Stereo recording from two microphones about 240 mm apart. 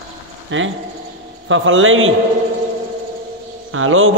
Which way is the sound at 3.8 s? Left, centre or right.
Right.